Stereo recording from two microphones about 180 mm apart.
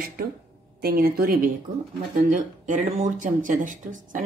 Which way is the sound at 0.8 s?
55° right (ahead or behind).